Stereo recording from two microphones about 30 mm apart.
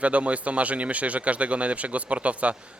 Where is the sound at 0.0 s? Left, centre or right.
Right.